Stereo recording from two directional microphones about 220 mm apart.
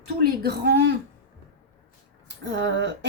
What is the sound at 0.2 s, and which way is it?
Speech, 45° right (ahead or behind).